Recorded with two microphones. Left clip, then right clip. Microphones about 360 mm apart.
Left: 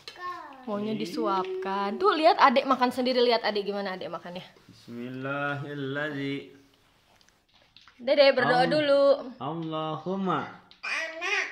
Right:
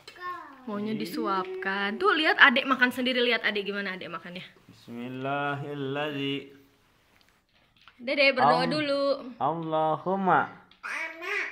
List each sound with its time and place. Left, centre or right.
0.7 s a woman's voice: centre
4.9 s speech: centre
8.0 s speech: centre
9.4 s speech: centre
10.8 s a sound: centre